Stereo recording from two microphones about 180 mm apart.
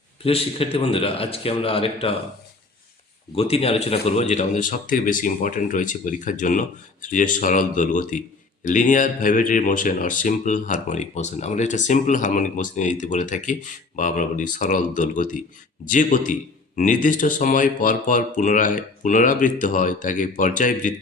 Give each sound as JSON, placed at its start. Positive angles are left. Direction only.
{"t": 0.2, "sound": "a man's voice", "side_deg": 30}
{"t": 3.3, "sound": "speech", "side_deg": 35}